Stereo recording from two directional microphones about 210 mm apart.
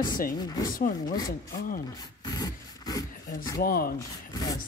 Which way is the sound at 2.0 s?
20° left (ahead or behind).